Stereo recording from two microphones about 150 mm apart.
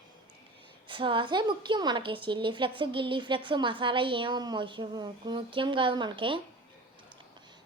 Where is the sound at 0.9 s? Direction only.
35° right (ahead or behind).